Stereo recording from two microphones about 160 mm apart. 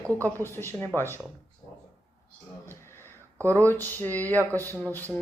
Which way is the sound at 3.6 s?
10° left (ahead or behind).